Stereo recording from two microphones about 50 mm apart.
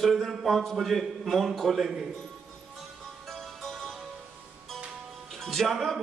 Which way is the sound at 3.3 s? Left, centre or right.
Centre.